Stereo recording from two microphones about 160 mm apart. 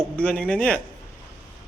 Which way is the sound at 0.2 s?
5° left (ahead or behind).